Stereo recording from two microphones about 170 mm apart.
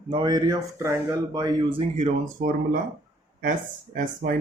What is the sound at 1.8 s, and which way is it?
Speech, 40° right (ahead or behind).